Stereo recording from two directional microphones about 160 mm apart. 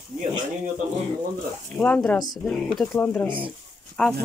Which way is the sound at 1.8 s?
10° left (ahead or behind).